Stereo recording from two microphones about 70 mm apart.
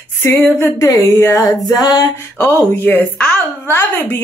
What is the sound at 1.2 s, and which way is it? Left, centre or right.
Speech, left.